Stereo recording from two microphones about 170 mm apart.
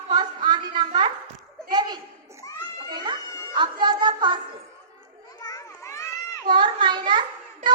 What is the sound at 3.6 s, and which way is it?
Music, 25° right (ahead or behind).